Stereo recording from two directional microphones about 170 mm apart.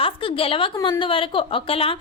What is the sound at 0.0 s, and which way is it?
A woman's voice, 30° left (ahead or behind).